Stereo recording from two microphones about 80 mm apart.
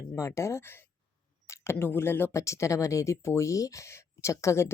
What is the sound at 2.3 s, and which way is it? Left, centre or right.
Speech, left.